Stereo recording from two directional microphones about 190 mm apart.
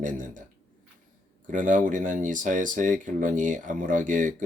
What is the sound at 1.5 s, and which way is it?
Speech, 45° right (ahead or behind).